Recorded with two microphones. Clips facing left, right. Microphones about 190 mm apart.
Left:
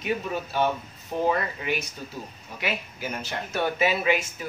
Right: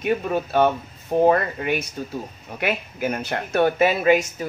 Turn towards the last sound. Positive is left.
turn(degrees=-45)  # may be behind; listen again after turning